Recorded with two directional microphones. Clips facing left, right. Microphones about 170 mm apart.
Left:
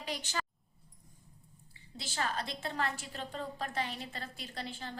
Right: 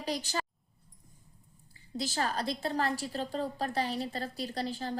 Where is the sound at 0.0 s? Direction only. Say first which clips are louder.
Right 5 dB; 35° right (ahead or behind).